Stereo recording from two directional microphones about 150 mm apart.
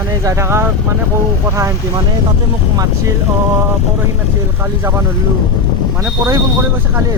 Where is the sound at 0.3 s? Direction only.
20° right (ahead or behind).